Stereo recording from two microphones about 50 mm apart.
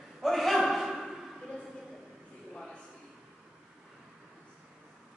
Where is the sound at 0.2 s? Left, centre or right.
Centre.